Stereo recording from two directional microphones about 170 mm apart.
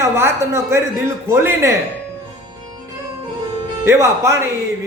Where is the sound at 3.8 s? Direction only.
15° right (ahead or behind).